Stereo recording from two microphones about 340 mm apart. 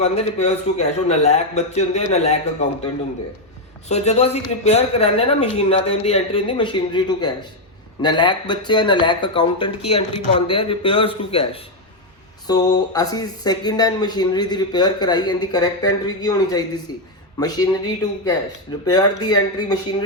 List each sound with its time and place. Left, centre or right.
0.0 s a man's voice: centre
3.8 s speech: centre